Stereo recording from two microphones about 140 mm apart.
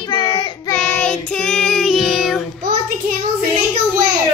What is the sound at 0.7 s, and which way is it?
Child singing, 15° left (ahead or behind).